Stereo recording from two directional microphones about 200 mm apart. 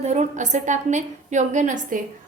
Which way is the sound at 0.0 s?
35° right (ahead or behind).